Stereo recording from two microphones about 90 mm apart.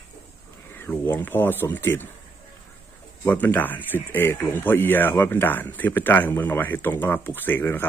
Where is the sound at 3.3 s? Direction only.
20° left (ahead or behind).